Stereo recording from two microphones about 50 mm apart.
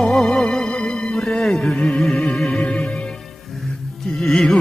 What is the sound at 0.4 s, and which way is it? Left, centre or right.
Music, centre.